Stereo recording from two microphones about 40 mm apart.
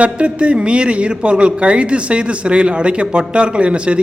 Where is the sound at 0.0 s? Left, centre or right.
Right.